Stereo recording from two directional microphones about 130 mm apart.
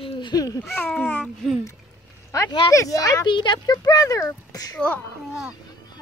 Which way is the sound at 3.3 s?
35° left (ahead or behind).